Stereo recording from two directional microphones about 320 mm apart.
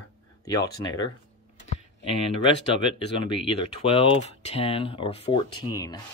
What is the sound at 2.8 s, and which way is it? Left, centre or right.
Speech, centre.